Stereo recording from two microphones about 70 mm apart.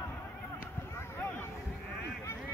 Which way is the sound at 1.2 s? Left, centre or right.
Left.